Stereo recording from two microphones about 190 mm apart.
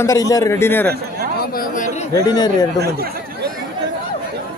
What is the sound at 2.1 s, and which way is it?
Speech, 20° left (ahead or behind).